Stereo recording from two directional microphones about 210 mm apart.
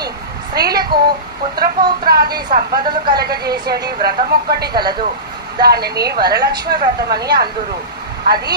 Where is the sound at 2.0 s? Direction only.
50° right (ahead or behind).